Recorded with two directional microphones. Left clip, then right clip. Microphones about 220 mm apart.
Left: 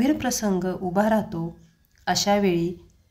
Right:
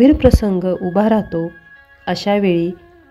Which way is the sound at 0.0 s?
35° right (ahead or behind).